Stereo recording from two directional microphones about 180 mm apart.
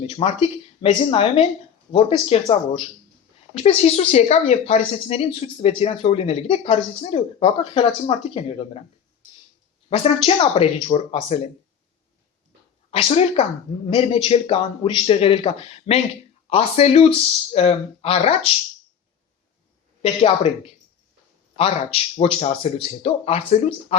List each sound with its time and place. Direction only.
0.1 s speech: 30° left (ahead or behind)
9.9 s speech: 30° left (ahead or behind)
12.9 s speech: 30° left (ahead or behind)
20.0 s speech: 30° left (ahead or behind)
21.5 s speech: 30° left (ahead or behind)